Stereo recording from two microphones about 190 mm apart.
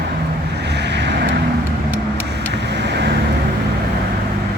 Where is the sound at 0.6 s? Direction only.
60° right (ahead or behind).